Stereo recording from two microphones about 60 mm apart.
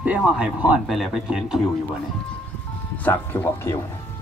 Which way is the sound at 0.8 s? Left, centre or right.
Centre.